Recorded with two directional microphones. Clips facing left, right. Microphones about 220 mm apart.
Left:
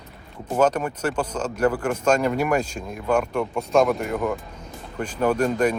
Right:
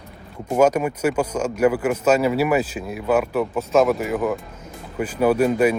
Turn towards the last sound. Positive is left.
turn(degrees=-10)  # may be behind; listen again after turning